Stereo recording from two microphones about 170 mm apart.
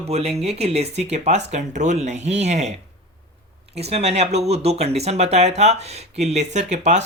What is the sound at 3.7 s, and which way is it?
Speech, 40° right (ahead or behind).